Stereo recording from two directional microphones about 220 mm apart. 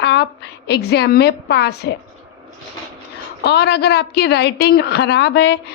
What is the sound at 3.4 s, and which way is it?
A woman's voice, 50° left (ahead or behind).